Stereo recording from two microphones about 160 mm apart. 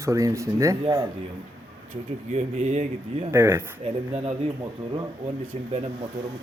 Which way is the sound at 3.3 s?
15° right (ahead or behind).